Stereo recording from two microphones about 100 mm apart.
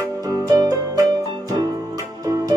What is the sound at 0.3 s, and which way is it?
Music, 35° right (ahead or behind).